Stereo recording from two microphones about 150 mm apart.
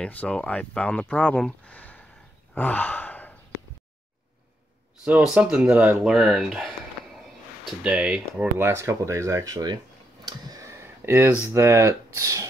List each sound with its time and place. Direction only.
0.0 s speech: 10° left (ahead or behind)
2.5 s sigh: 10° left (ahead or behind)
5.0 s speech: 10° right (ahead or behind)
6.1 s speech: centre (ahead or behind)
8.6 s speech: 20° right (ahead or behind)
10.2 s clicking: 25° right (ahead or behind)
11.4 s speech: 15° right (ahead or behind)